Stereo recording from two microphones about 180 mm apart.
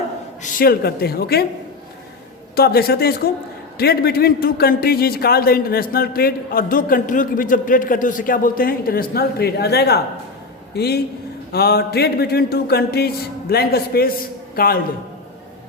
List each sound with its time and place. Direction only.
0.4 s a man's voice: 55° left (ahead or behind)
2.6 s a man's voice: 60° left (ahead or behind)